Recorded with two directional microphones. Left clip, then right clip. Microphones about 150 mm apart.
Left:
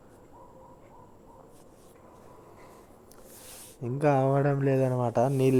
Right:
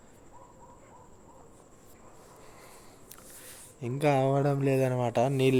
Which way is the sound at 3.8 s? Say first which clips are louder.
Left 1 dB; 5° left (ahead or behind).